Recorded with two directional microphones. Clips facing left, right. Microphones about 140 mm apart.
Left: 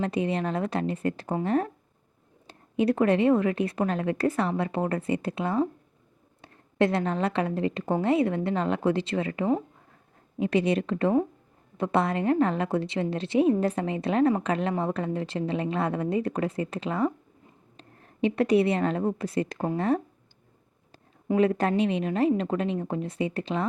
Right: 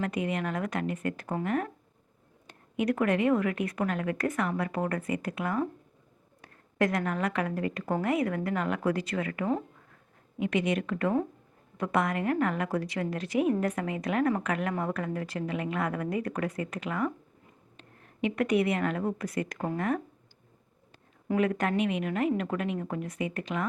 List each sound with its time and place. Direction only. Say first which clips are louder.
0.0 s a woman's voice: left 4 dB; 30° left (ahead or behind)
21.2 s a woman's voice: left 4 dB; 30° left (ahead or behind)